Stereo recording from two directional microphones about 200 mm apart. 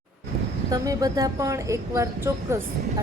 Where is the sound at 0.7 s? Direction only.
20° right (ahead or behind).